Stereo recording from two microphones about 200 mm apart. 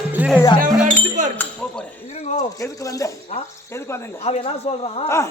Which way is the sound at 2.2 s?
35° left (ahead or behind).